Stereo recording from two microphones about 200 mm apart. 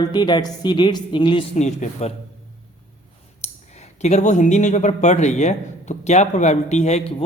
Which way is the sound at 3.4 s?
35° left (ahead or behind).